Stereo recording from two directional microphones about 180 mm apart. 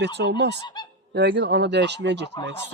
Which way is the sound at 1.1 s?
75° right (ahead or behind).